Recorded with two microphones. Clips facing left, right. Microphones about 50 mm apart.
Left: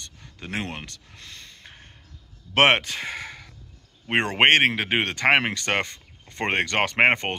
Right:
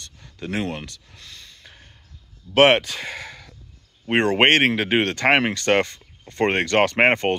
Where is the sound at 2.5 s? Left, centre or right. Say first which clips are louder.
Right 3 dB; left.